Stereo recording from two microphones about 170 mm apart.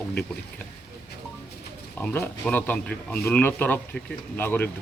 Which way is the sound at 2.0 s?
10° left (ahead or behind).